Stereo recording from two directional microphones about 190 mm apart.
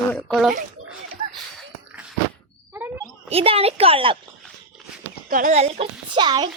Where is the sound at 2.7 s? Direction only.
10° right (ahead or behind).